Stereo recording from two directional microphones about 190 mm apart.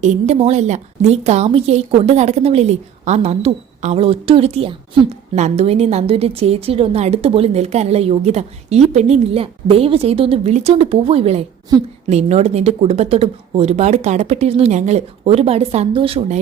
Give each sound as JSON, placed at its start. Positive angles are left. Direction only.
{"t": 0.0, "sound": "a woman's voice", "side_deg": -35}